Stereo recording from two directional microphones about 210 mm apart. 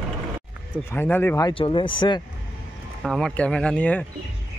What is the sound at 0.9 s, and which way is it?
Speech, 10° left (ahead or behind).